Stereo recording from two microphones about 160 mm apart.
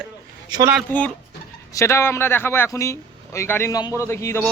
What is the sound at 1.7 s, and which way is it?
A man's voice, 20° left (ahead or behind).